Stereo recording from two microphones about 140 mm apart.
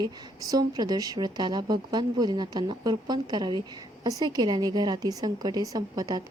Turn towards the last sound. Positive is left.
turn(degrees=-25)  # may be behind; listen again after turning